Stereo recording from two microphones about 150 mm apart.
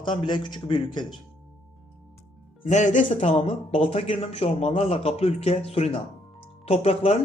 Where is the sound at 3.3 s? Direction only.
40° left (ahead or behind).